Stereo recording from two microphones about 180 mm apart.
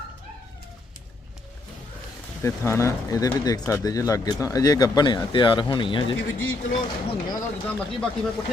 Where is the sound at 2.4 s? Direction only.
15° left (ahead or behind).